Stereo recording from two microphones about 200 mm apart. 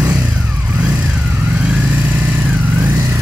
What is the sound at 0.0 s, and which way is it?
Vehicle, 15° right (ahead or behind).